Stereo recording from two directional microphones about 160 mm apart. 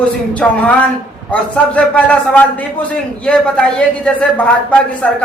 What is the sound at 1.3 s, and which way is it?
Speech, 10° left (ahead or behind).